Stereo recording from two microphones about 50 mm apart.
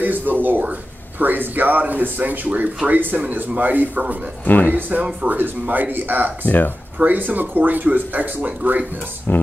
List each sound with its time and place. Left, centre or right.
0.0 s speech: right
4.5 s speech: left
4.7 s speech: right
6.4 s speech: left
7.0 s speech: right
9.3 s speech: left